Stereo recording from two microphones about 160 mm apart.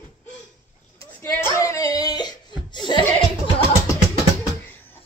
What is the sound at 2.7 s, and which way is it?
Chuckle, 30° left (ahead or behind).